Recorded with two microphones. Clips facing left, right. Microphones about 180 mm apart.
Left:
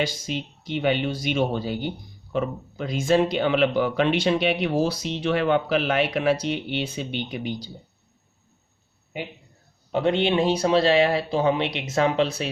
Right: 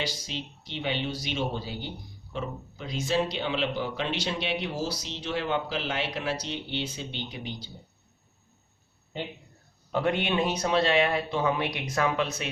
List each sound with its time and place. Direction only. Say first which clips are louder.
0.0 s speech: left 7 dB; 50° left (ahead or behind)
9.9 s speech: left 5 dB; 25° left (ahead or behind)